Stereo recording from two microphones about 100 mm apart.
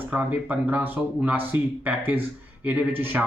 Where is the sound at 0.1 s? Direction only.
15° right (ahead or behind).